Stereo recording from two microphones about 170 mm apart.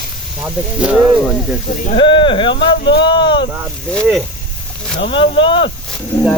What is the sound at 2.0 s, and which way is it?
Speech, 30° left (ahead or behind).